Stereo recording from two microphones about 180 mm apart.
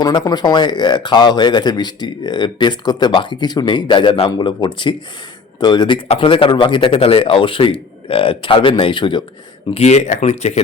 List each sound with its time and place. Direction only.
0.0 s speech: 20° left (ahead or behind)
9.6 s speech: 35° left (ahead or behind)